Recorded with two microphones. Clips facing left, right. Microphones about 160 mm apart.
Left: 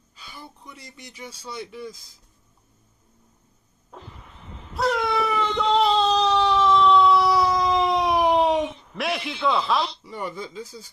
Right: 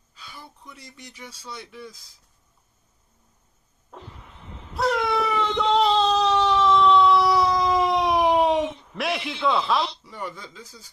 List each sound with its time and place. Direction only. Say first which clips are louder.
0.2 s speech: left 1 dB; centre (ahead or behind)
3.9 s vehicle: even; centre (ahead or behind)
4.7 s baby cry: even; centre (ahead or behind)
10.0 s speech: left 3 dB; 20° left (ahead or behind)